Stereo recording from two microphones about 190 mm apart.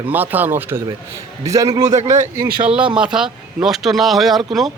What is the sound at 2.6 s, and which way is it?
Speech, 5° right (ahead or behind).